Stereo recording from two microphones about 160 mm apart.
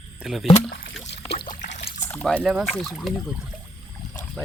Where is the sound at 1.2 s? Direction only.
30° left (ahead or behind).